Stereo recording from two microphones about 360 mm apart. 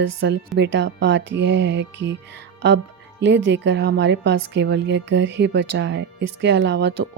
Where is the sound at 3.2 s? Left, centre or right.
Right.